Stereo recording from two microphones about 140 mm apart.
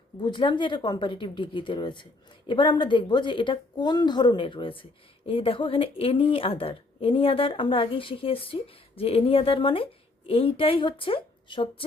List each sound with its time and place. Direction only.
0.2 s a woman's voice: 35° left (ahead or behind)